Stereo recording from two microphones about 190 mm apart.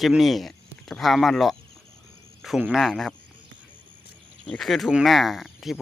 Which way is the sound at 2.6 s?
5° right (ahead or behind).